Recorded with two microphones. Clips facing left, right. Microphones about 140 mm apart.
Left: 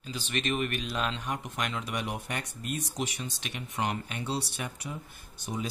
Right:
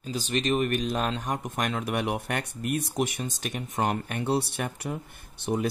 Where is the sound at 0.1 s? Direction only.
35° right (ahead or behind).